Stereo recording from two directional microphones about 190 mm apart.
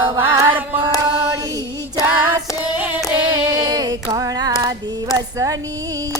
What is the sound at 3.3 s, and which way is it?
Female singing, 20° right (ahead or behind).